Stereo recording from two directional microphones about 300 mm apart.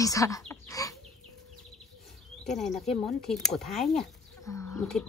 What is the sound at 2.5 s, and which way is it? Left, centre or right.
Speech, centre.